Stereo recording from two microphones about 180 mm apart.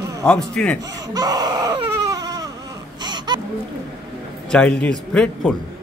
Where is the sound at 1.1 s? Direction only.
20° right (ahead or behind).